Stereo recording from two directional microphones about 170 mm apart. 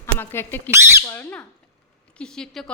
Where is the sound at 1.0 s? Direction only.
10° left (ahead or behind).